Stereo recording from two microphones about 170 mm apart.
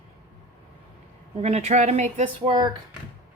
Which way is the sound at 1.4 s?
40° right (ahead or behind).